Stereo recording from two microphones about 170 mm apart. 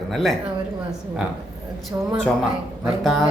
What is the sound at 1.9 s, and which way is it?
Speech, 15° right (ahead or behind).